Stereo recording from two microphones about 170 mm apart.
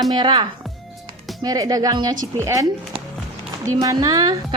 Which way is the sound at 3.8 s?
25° right (ahead or behind).